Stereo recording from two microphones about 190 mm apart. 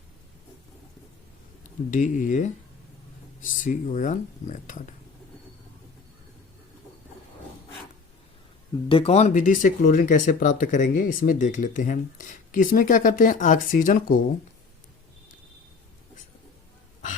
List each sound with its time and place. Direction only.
1.9 s speech: 45° left (ahead or behind)
8.9 s speech: 30° left (ahead or behind); by 14.2 s 45° left (ahead or behind)